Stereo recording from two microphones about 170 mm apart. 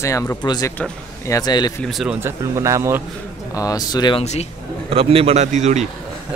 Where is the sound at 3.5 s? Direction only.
20° left (ahead or behind).